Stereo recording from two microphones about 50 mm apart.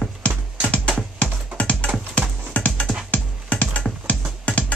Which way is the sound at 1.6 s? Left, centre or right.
Left.